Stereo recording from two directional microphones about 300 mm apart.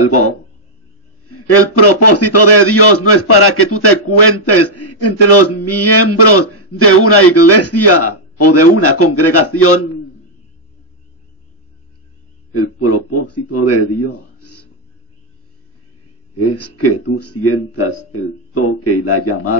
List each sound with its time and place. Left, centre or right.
0.0 s a man's voice: left
12.5 s a man's voice: left
16.3 s a man's voice: left